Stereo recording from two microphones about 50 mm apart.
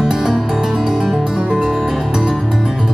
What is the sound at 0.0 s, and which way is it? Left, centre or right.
Music, centre.